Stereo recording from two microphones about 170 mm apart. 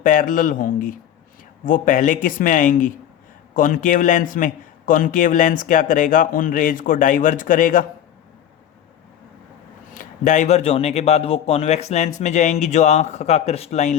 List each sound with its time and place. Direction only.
0.0 s a man's voice: 50° left (ahead or behind)
9.9 s speech: 50° left (ahead or behind)